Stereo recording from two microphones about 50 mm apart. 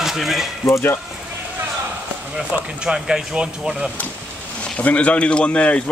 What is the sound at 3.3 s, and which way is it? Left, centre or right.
Speech, right.